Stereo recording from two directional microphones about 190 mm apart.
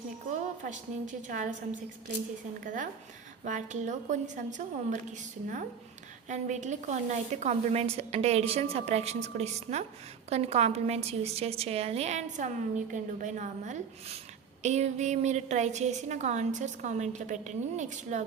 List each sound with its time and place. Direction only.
0.3 s a woman's voice: 40° right (ahead or behind)